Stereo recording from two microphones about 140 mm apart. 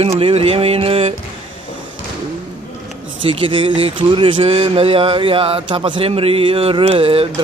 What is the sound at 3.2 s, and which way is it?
Speech, 40° right (ahead or behind).